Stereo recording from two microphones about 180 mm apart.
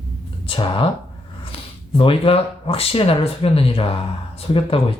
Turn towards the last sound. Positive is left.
turn(degrees=30)  # may be behind; listen again after turning